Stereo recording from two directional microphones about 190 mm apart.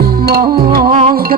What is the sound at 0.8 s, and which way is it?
Music, 30° right (ahead or behind).